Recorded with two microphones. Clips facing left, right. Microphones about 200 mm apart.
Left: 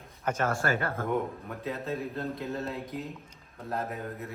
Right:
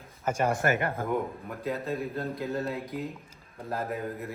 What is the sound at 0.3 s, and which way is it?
Speech, 15° right (ahead or behind).